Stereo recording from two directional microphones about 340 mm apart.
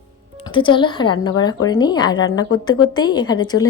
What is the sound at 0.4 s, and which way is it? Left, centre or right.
Speech, centre.